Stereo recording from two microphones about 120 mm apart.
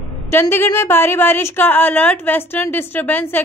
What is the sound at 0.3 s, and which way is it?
A woman's voice, 20° left (ahead or behind).